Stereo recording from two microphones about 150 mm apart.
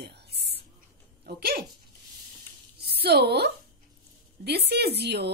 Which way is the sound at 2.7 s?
90° right.